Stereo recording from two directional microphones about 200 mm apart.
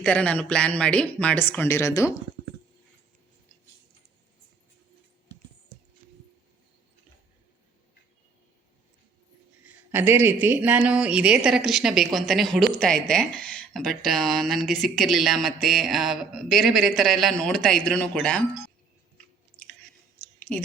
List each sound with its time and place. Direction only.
0.0 s speech: 5° left (ahead or behind)
9.6 s speech: 10° right (ahead or behind)
19.5 s chewing: 25° left (ahead or behind)